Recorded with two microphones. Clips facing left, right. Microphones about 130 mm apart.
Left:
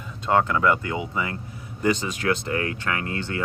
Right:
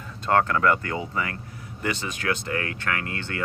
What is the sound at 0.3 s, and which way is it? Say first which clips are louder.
Speech: even; 10° left (ahead or behind).